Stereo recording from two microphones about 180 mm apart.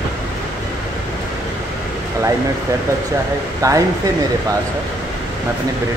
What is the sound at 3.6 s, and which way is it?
Speech, 20° right (ahead or behind).